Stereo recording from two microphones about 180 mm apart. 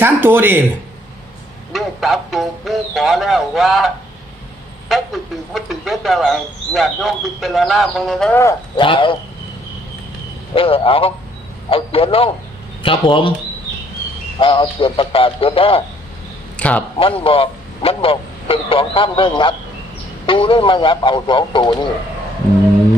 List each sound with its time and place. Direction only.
0.0 s speech: 10° right (ahead or behind)
1.7 s speech: centre (ahead or behind)
8.7 s a man's voice: 25° left (ahead or behind)
10.5 s a man's voice: 30° left (ahead or behind)
14.3 s a man's voice: 30° left (ahead or behind)
16.6 s a man's voice: 5° left (ahead or behind)
17.0 s a man's voice: 30° left (ahead or behind)